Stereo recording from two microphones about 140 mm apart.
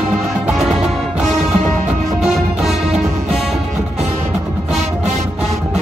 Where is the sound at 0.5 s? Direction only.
Centre (ahead or behind).